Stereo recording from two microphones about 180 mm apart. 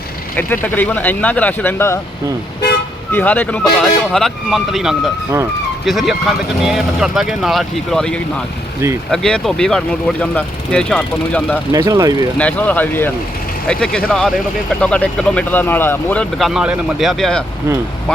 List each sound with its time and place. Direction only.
0.3 s speech: 10° left (ahead or behind)
3.1 s speech: 10° left (ahead or behind)
11.7 s speech: 20° right (ahead or behind)
12.4 s speech: 10° left (ahead or behind)